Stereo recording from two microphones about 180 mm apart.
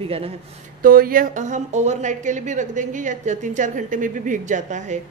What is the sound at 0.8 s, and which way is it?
A woman's voice, 50° right (ahead or behind).